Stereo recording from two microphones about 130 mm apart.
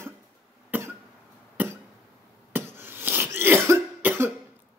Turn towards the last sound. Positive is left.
turn(degrees=-15)  # may be behind; listen again after turning